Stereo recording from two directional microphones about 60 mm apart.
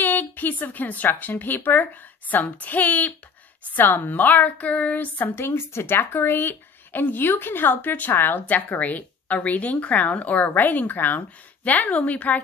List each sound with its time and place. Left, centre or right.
0.0 s a woman's voice: left
5.4 s a woman's voice: left